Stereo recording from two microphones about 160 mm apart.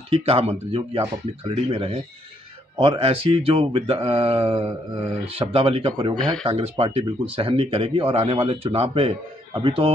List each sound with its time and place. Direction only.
0.1 s speech: 40° right (ahead or behind)
3.0 s speech: 35° right (ahead or behind)